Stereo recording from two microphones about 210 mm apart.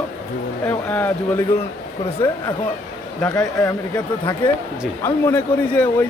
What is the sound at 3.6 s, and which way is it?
A man's voice, 15° left (ahead or behind).